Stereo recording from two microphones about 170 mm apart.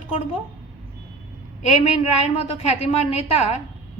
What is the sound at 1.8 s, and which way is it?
A woman's voice, 40° left (ahead or behind).